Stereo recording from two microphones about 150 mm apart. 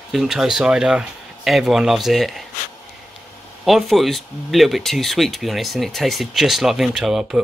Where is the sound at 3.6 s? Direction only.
Centre (ahead or behind).